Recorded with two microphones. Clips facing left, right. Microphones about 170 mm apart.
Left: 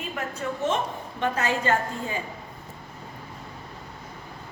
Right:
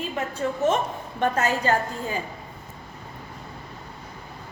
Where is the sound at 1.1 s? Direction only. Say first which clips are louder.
Right 4 dB; 45° right (ahead or behind).